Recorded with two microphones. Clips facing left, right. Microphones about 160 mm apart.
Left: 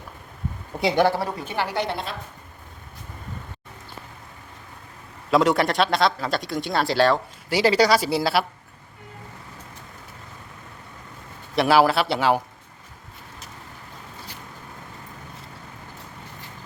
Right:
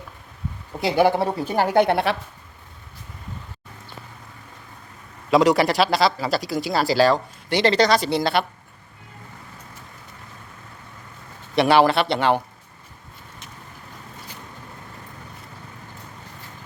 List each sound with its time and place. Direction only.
0.8 s speech: centre (ahead or behind)
1.0 s a woman's voice: 20° right (ahead or behind)
1.4 s a woman's voice: 40° right (ahead or behind); by 2.1 s 65° right (ahead or behind)
5.3 s speech: centre (ahead or behind)
11.5 s speech: centre (ahead or behind)